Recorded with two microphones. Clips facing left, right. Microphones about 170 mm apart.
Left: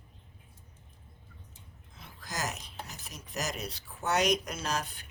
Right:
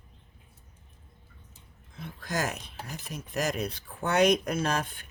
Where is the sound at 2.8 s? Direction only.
55° right (ahead or behind).